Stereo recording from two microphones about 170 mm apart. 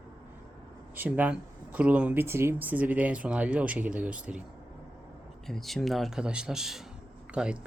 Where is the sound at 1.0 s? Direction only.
10° right (ahead or behind).